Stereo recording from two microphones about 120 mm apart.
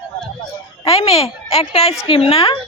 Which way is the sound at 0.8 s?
55° left (ahead or behind).